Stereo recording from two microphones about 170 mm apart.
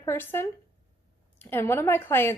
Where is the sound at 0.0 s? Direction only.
15° left (ahead or behind).